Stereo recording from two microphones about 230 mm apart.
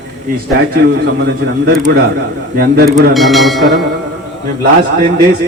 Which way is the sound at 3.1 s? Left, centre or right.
Centre.